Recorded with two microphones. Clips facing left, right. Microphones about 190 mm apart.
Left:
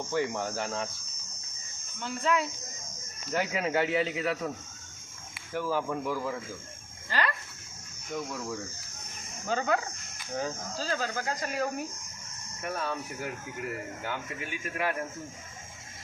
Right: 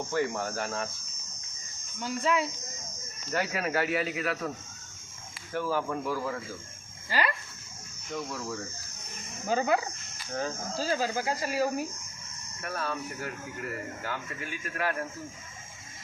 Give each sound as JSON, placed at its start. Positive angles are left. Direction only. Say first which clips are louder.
{"t": 0.1, "sound": "speech", "louder": "even", "side_deg": 15}
{"t": 2.0, "sound": "speech", "louder": "right 1 dB", "side_deg": -5}
{"t": 3.3, "sound": "speech", "louder": "left 1 dB", "side_deg": 20}
{"t": 5.5, "sound": "speech", "louder": "even", "side_deg": 15}
{"t": 7.1, "sound": "speech", "louder": "right 1 dB", "side_deg": -10}
{"t": 9.5, "sound": "speech", "louder": "right 2 dB", "side_deg": -10}
{"t": 12.6, "sound": "speech", "louder": "left 1 dB", "side_deg": 15}